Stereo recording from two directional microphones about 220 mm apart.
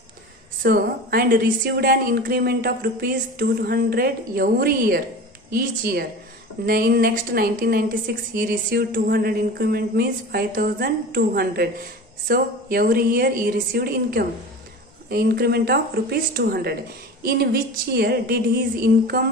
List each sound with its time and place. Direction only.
0.6 s a woman's voice: 40° right (ahead or behind)